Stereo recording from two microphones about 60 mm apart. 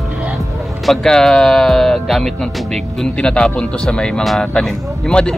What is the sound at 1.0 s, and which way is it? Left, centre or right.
Speech, centre.